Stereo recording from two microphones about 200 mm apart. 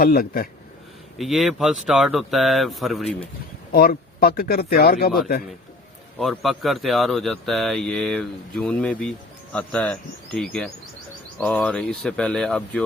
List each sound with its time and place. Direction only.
0.0 s speech: 45° left (ahead or behind)
1.2 s speech: centre (ahead or behind)
3.7 s speech: 50° left (ahead or behind)
6.1 s speech: centre (ahead or behind)